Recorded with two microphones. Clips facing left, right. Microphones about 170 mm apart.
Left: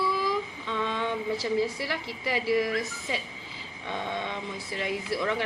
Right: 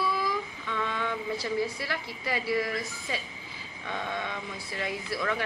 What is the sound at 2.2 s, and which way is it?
A woman's voice, 15° left (ahead or behind).